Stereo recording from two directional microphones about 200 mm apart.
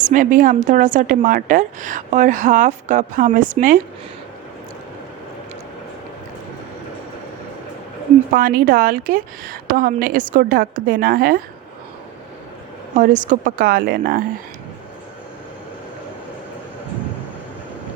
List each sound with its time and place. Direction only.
0.1 s a woman's voice: 40° right (ahead or behind)
8.3 s a woman's voice: 45° right (ahead or behind)
13.0 s a woman's voice: 40° right (ahead or behind)